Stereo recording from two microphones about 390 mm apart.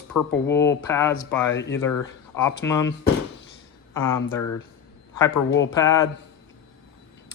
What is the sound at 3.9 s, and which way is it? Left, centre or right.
Speech, centre.